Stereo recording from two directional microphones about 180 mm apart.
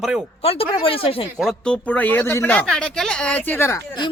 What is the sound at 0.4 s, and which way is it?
Speech, 30° left (ahead or behind).